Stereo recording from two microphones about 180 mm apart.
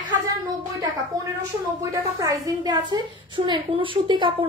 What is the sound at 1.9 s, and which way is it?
A woman's voice, 20° right (ahead or behind).